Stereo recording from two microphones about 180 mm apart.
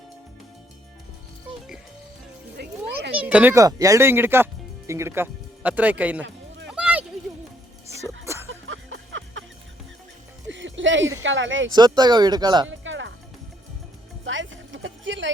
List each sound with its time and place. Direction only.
2.6 s music: 70° right (ahead or behind)
3.2 s speech: 5° right (ahead or behind)
6.7 s a sound: 5° right (ahead or behind)
8.2 s a sound: 15° right (ahead or behind)
8.6 s music: 90° right
10.5 s music: 90° right
11.2 s speech: 90° right
11.7 s speech: 25° right (ahead or behind)
12.8 s music: 90° right
14.3 s a sound: 90° right